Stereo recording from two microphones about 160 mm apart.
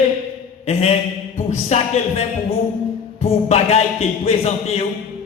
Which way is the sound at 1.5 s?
45° left (ahead or behind).